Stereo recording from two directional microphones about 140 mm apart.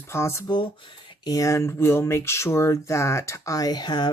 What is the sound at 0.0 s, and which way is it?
Speech, 20° left (ahead or behind).